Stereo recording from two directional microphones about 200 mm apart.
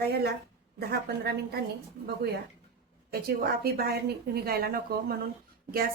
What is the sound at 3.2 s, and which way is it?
A woman's voice, 50° right (ahead or behind).